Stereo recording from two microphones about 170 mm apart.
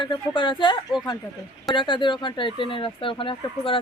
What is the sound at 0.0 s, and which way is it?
Speech, 30° left (ahead or behind).